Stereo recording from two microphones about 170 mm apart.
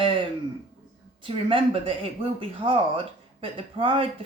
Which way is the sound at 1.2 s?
30° right (ahead or behind).